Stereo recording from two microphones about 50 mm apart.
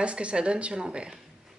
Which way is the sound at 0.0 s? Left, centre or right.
Right.